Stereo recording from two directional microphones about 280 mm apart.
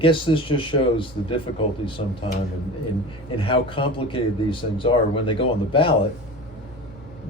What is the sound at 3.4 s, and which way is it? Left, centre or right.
Speech, centre.